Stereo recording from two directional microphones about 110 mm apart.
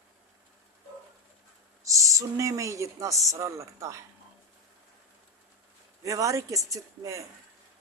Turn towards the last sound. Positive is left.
turn(degrees=-30)  # may be behind; listen again after turning